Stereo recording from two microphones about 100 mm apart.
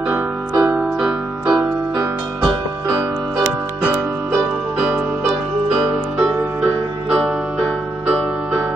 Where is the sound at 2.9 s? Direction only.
30° right (ahead or behind).